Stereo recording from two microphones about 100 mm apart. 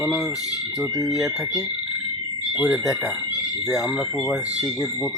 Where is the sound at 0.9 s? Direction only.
35° left (ahead or behind).